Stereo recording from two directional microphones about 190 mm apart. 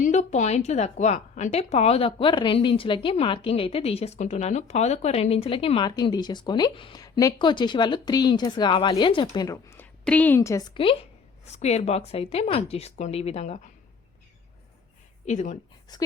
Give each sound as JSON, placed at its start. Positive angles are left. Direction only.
{"t": 0.0, "sound": "a woman's voice", "side_deg": 40}
{"t": 11.5, "sound": "speech", "side_deg": 35}
{"t": 15.3, "sound": "speech", "side_deg": 35}
{"t": 15.9, "sound": "a woman's voice", "side_deg": 20}